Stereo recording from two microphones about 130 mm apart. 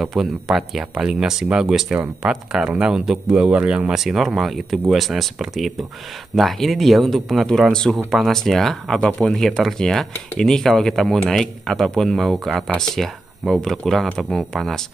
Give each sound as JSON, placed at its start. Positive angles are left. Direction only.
{"t": 0.0, "sound": "speech", "side_deg": 0}